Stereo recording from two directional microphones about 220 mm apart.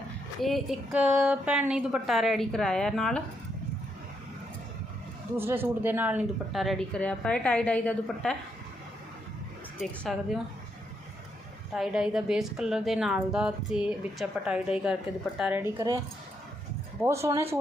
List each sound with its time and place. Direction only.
0.4 s a woman's voice: centre (ahead or behind)
5.4 s a woman's voice: 10° right (ahead or behind)
9.8 s a woman's voice: centre (ahead or behind)
11.7 s a woman's voice: 5° right (ahead or behind)
17.0 s speech: 10° right (ahead or behind)